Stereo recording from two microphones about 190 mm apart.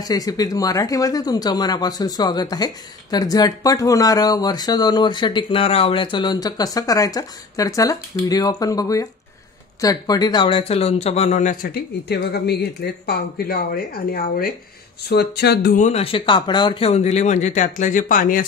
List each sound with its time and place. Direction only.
0.0 s speech: 20° left (ahead or behind); by 11.7 s 40° left (ahead or behind)
11.7 s speech: 60° left (ahead or behind)